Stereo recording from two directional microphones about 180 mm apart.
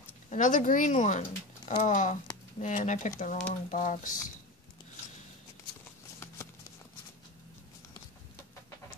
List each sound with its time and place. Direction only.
0.3 s speech: 45° left (ahead or behind)